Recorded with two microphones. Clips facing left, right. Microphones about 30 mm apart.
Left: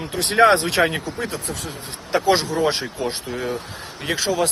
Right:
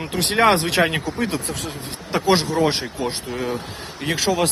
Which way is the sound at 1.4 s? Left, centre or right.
Right.